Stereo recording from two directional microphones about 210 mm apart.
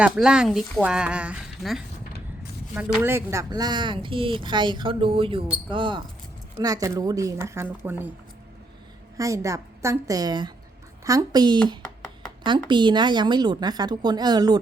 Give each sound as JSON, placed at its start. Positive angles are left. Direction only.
{"t": 0.0, "sound": "a woman's voice", "side_deg": -5}
{"t": 9.1, "sound": "a woman's voice", "side_deg": -15}
{"t": 11.8, "sound": "a sound", "side_deg": 5}
{"t": 12.5, "sound": "speech", "side_deg": -20}